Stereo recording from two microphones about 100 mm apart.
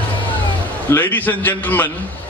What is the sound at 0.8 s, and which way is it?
A man's voice, 20° left (ahead or behind).